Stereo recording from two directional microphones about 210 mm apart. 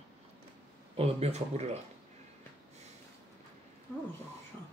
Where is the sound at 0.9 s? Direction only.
30° right (ahead or behind).